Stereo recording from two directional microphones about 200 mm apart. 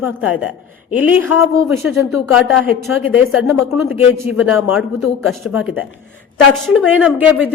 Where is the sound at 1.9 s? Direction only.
85° left.